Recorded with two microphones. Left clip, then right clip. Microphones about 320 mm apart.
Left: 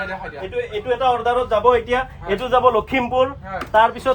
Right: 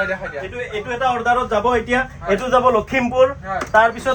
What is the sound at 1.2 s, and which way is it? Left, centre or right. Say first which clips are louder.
A man's voice: even; left.